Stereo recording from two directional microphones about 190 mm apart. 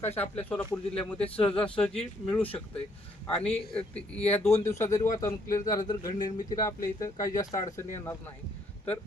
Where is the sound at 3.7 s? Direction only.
5° left (ahead or behind).